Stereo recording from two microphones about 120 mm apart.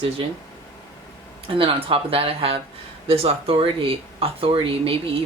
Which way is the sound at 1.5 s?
50° right (ahead or behind).